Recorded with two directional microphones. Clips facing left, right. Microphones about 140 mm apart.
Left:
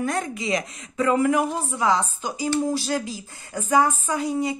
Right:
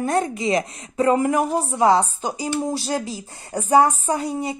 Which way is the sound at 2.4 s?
15° right (ahead or behind).